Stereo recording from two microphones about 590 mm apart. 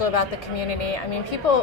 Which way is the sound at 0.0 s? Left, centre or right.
Left.